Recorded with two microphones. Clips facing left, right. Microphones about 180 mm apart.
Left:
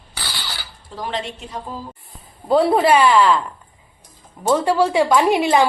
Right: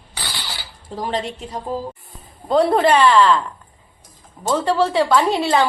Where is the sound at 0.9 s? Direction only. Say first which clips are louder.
Right 3 dB; 40° right (ahead or behind).